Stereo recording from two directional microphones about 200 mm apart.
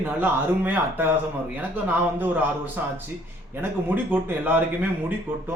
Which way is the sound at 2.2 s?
10° right (ahead or behind).